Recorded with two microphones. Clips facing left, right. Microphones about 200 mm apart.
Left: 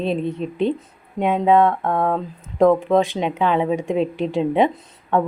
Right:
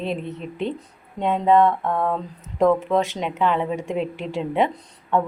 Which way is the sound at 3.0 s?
15° left (ahead or behind).